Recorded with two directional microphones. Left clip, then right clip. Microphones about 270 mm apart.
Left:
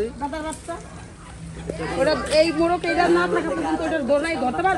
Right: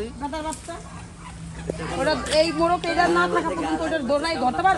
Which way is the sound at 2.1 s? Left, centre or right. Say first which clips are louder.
Left 1 dB; centre.